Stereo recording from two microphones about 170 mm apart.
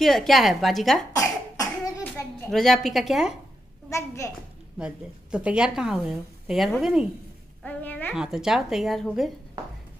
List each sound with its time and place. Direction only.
0.0 s a woman's voice: centre (ahead or behind)
1.1 s cough: 20° left (ahead or behind)
2.5 s a woman's voice: centre (ahead or behind)
3.9 s a child's voice: 15° left (ahead or behind)
4.7 s a woman's voice: 5° right (ahead or behind)
7.6 s a sound: 10° left (ahead or behind)
8.1 s a woman's voice: 5° right (ahead or behind)